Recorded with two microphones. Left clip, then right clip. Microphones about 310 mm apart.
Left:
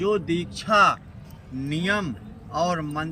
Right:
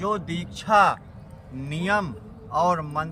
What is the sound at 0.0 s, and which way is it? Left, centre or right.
Speech, centre.